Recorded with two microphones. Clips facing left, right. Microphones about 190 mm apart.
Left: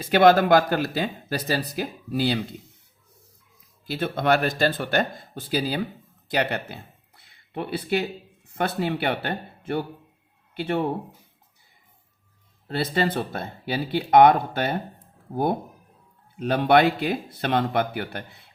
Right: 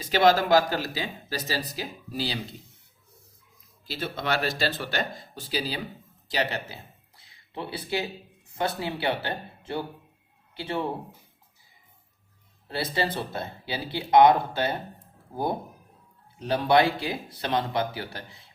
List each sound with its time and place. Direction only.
0.0 s speech: 55° left (ahead or behind)
3.8 s speech: 55° left (ahead or behind)
7.2 s a sound: 60° left (ahead or behind)
8.4 s speech: 60° left (ahead or behind)
12.6 s speech: 60° left (ahead or behind)
16.4 s speech: 60° left (ahead or behind)